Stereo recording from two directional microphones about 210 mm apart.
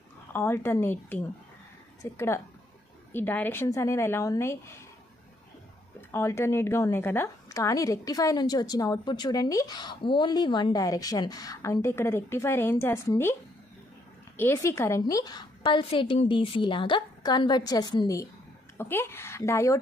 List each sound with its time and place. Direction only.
0.3 s speech: 10° left (ahead or behind)
5.9 s a woman's voice: 15° left (ahead or behind)